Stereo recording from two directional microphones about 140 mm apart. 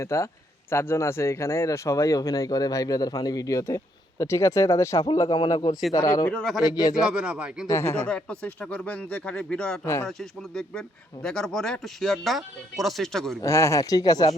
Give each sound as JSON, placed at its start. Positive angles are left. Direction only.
{"t": 0.0, "sound": "speech", "side_deg": 20}
{"t": 6.2, "sound": "speech", "side_deg": 5}
{"t": 6.6, "sound": "speech", "side_deg": 30}
{"t": 7.0, "sound": "speech", "side_deg": -5}
{"t": 7.7, "sound": "speech", "side_deg": 20}
{"t": 9.8, "sound": "speech", "side_deg": 20}
{"t": 10.1, "sound": "speech", "side_deg": 5}
{"t": 13.4, "sound": "speech", "side_deg": 20}